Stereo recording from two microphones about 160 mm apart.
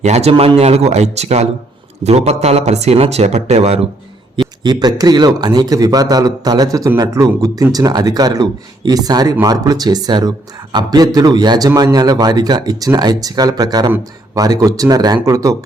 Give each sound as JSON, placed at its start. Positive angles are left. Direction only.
{"t": 0.0, "sound": "speech", "side_deg": -45}
{"t": 4.6, "sound": "a man's voice", "side_deg": -25}